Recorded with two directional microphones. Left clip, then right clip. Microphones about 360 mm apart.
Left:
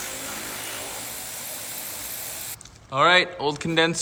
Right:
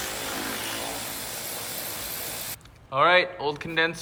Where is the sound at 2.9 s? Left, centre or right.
Centre.